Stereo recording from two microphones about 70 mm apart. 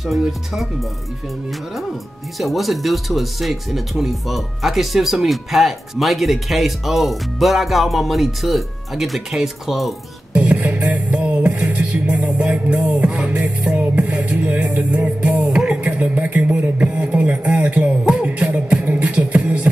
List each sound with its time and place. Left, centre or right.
0.0 s speech: centre
2.3 s speech: centre
10.3 s music: centre
13.3 s music: right
15.8 s a sound: right
19.0 s beatboxing: centre